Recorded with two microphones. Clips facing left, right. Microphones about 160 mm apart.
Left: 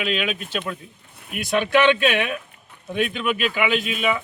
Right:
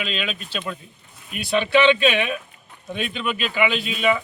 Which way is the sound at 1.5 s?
5° left (ahead or behind).